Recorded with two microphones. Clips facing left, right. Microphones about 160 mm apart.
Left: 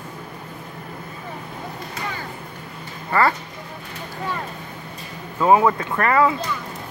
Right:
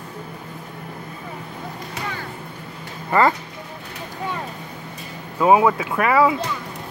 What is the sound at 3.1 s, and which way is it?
Speech, 20° right (ahead or behind).